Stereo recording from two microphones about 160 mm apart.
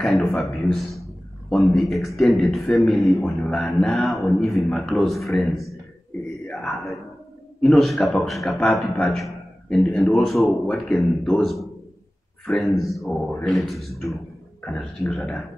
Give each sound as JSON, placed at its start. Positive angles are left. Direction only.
{"t": 0.0, "sound": "a man's voice", "side_deg": 0}
{"t": 6.3, "sound": "a sound", "side_deg": 0}
{"t": 7.6, "sound": "a man's voice", "side_deg": 0}